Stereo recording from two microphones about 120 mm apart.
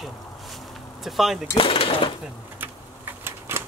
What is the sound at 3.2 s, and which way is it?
Typewriter, 20° right (ahead or behind).